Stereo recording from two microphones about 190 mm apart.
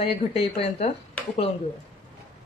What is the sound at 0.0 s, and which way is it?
Speech, 30° left (ahead or behind).